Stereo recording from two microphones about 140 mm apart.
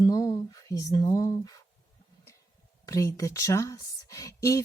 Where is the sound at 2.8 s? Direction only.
25° left (ahead or behind).